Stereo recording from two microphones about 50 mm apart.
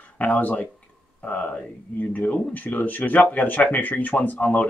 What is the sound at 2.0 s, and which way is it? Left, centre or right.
Speech, left.